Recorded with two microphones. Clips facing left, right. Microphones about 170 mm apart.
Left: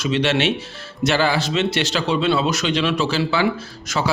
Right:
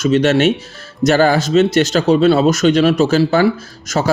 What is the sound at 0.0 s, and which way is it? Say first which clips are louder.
Speech: right 7 dB; 45° right (ahead or behind).